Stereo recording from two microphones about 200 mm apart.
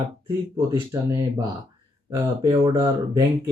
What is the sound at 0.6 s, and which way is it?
Speech, 15° right (ahead or behind).